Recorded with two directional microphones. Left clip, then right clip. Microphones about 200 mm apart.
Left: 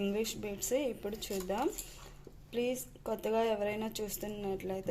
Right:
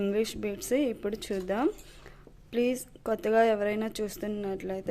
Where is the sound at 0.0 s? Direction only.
30° right (ahead or behind).